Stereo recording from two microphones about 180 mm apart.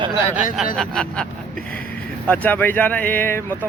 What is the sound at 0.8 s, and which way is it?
Speech, 5° left (ahead or behind).